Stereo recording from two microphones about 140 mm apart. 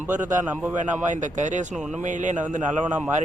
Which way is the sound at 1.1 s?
60° right (ahead or behind).